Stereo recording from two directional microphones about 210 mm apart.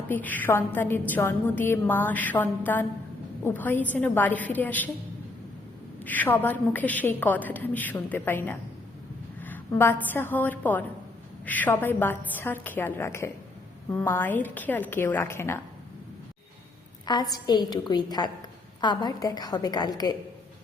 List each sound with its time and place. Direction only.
0.1 s a woman's voice: 10° left (ahead or behind)
6.0 s a woman's voice: 10° left (ahead or behind)
17.1 s a woman's voice: 20° left (ahead or behind)